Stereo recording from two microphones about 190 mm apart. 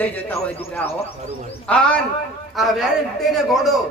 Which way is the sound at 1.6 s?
5° left (ahead or behind).